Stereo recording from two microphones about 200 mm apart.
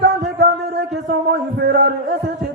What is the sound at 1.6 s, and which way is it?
Music, 55° right (ahead or behind).